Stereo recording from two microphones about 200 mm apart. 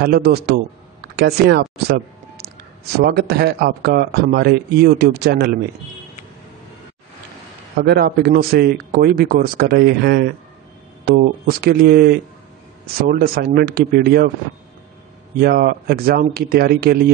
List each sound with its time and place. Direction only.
0.0 s speech: 55° right (ahead or behind)
3.0 s speech: 55° right (ahead or behind)
7.7 s speech: 55° right (ahead or behind)
15.3 s speech: 50° right (ahead or behind)